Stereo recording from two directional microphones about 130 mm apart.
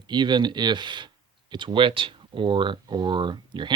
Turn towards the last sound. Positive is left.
turn(degrees=-35)  # may be behind; listen again after turning